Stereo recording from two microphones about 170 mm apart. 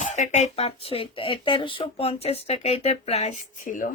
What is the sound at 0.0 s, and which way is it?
Speech, 45° left (ahead or behind).